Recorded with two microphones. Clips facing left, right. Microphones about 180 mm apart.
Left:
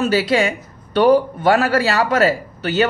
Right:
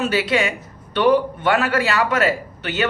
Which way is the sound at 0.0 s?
35° left (ahead or behind).